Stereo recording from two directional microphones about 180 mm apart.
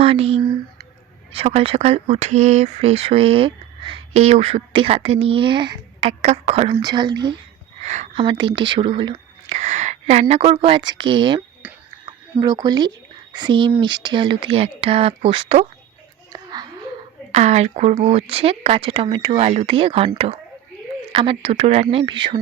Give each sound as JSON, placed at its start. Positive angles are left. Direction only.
{"t": 0.0, "sound": "speech", "side_deg": -35}
{"t": 7.8, "sound": "speech", "side_deg": -40}
{"t": 11.6, "sound": "finger snapping", "side_deg": -10}
{"t": 12.0, "sound": "speech", "side_deg": -20}
{"t": 16.3, "sound": "a sound", "side_deg": -20}
{"t": 17.3, "sound": "speech", "side_deg": -40}
{"t": 21.1, "sound": "speech", "side_deg": -30}